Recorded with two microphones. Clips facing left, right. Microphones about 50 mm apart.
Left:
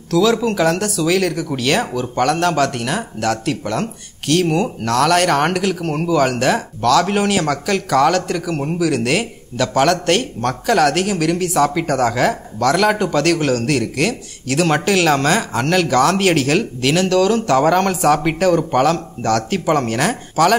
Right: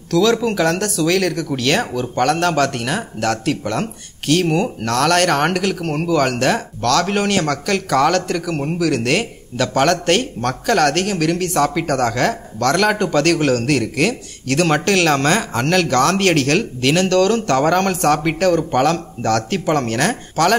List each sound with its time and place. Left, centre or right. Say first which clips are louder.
0.1 s speech: even; centre